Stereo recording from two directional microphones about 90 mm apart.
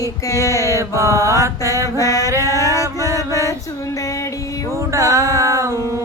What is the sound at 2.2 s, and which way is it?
Male singing, 40° right (ahead or behind).